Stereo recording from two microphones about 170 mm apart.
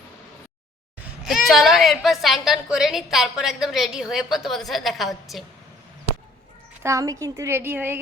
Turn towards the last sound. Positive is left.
turn(degrees=-10)  # may be behind; listen again after turning